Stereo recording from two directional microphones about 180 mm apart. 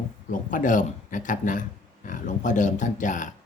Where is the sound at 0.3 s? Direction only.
45° left (ahead or behind).